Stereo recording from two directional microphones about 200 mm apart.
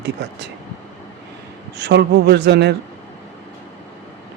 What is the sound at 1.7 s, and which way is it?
Speech, 60° right (ahead or behind).